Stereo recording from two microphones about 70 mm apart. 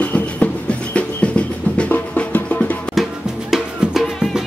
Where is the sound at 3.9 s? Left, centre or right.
Centre.